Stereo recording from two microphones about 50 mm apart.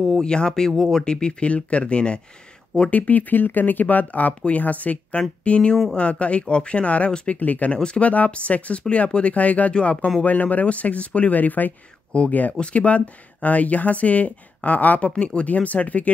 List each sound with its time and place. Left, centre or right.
0.0 s speech: centre
2.9 s speech: left
9.8 s speech: centre
10.2 s speech: left